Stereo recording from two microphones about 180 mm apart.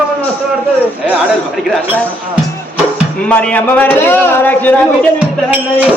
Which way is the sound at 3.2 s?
5° left (ahead or behind).